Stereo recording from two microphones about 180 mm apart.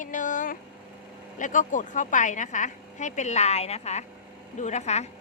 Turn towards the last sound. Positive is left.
turn(degrees=40)  # may be behind; listen again after turning